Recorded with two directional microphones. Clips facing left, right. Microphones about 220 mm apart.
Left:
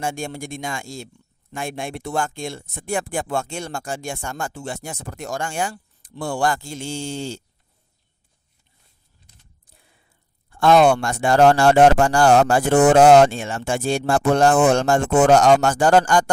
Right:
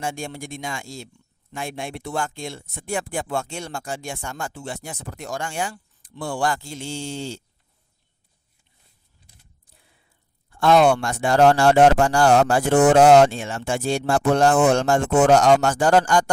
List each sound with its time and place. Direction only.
0.0 s speech: 45° left (ahead or behind)
10.5 s speech: 50° left (ahead or behind)